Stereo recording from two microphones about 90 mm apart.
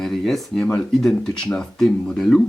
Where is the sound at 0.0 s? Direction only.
Centre (ahead or behind).